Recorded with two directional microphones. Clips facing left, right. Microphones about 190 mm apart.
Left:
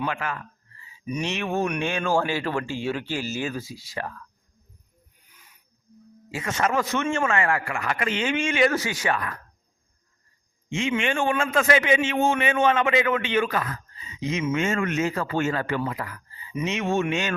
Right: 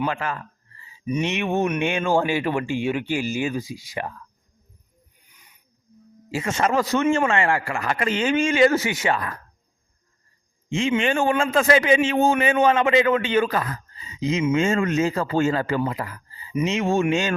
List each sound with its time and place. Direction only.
0.0 s a man's voice: 35° right (ahead or behind)
0.8 s a sound: 30° right (ahead or behind)
1.2 s speech: 20° right (ahead or behind)
6.3 s a man's voice: 25° right (ahead or behind)
10.7 s a man's voice: 35° right (ahead or behind)